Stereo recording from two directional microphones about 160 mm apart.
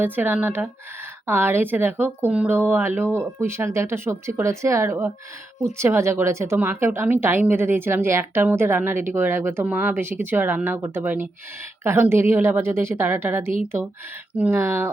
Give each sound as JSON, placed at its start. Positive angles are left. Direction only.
{"t": 0.0, "sound": "a woman's voice", "side_deg": -10}